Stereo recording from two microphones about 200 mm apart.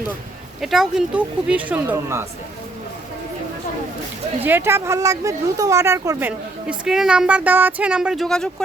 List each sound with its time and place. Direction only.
0.6 s speech: centre (ahead or behind)
4.4 s speech: 10° right (ahead or behind)